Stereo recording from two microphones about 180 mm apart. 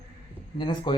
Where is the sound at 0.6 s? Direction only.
25° left (ahead or behind).